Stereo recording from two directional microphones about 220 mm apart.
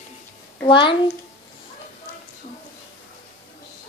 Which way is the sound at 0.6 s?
20° left (ahead or behind).